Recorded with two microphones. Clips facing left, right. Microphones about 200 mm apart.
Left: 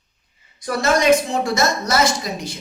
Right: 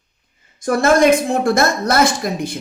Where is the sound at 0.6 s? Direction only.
50° right (ahead or behind).